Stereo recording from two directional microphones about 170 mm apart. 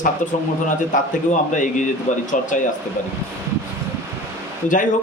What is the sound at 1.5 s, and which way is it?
Speech, 50° left (ahead or behind).